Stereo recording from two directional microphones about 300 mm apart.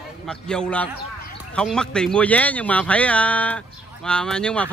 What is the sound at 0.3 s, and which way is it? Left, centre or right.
Speech, centre.